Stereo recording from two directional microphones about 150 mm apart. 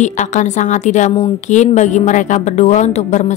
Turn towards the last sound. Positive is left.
turn(degrees=50)  # may be behind; listen again after turning